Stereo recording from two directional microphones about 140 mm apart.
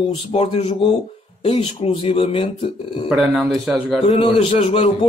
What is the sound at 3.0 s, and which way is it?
Speech, 5° right (ahead or behind).